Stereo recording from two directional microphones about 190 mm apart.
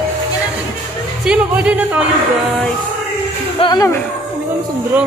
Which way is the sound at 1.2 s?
5° right (ahead or behind).